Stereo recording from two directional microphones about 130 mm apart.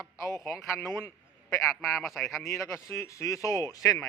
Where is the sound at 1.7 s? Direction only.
Centre (ahead or behind).